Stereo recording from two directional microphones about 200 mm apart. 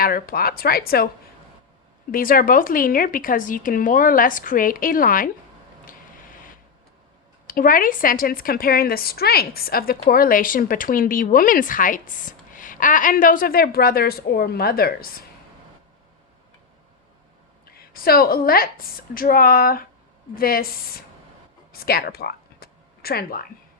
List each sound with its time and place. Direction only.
0.0 s speech: 45° left (ahead or behind)
2.1 s speech: 45° left (ahead or behind)
7.5 s speech: 45° left (ahead or behind)
17.9 s speech: 50° left (ahead or behind)
21.7 s a sound: 50° left (ahead or behind)